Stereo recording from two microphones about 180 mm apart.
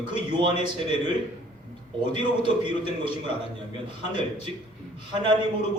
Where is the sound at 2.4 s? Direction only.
25° right (ahead or behind).